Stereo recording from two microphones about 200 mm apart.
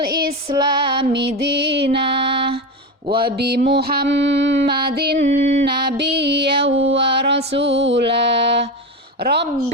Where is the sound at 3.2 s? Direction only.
50° right (ahead or behind).